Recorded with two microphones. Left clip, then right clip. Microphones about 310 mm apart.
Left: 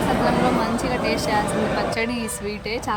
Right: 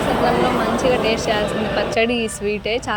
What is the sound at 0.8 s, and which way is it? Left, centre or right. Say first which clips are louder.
A woman's voice: right 5 dB; centre.